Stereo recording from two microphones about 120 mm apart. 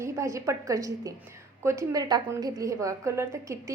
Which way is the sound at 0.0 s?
25° right (ahead or behind).